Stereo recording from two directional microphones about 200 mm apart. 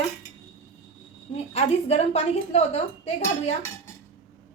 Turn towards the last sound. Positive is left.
turn(degrees=30)  # may be behind; listen again after turning